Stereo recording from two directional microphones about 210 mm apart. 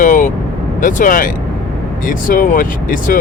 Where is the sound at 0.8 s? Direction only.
40° left (ahead or behind).